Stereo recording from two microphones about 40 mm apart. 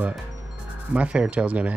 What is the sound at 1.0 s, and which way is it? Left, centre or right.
Speech, right.